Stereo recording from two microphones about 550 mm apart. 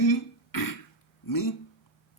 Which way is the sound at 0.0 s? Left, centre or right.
Left.